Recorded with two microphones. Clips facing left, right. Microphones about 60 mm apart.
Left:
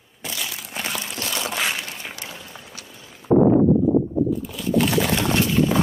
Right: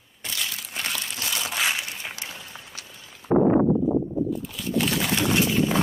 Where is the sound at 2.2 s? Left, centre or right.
Centre.